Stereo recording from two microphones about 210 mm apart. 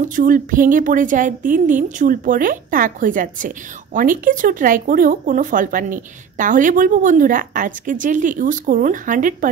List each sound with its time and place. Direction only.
0.1 s speech: 40° right (ahead or behind)